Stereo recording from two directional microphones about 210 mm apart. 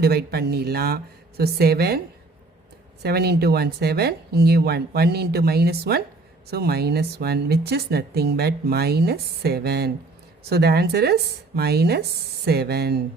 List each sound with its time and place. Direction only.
0.0 s speech: 50° right (ahead or behind)
3.0 s speech: 50° right (ahead or behind)